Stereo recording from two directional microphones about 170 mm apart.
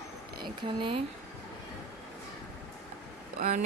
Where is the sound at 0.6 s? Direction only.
30° right (ahead or behind).